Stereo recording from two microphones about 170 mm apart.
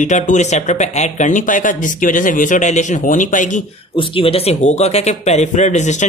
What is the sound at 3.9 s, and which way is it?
Speech, 30° left (ahead or behind).